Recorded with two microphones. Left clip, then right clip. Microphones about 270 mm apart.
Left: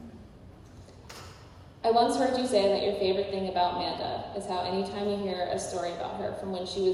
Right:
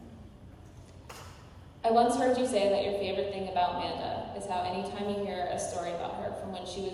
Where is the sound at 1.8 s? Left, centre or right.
Left.